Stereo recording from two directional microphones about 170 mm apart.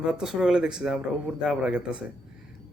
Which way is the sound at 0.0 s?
5° right (ahead or behind).